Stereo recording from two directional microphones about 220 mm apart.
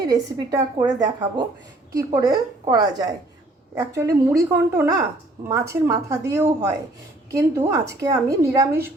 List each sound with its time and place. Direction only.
0.1 s speech: 15° right (ahead or behind)